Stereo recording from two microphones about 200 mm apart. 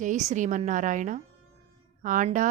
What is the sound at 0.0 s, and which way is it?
Speech, 35° right (ahead or behind).